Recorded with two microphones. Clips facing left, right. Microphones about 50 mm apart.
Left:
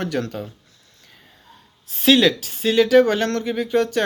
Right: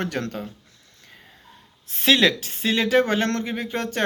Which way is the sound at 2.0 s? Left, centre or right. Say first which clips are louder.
Left 3 dB; right.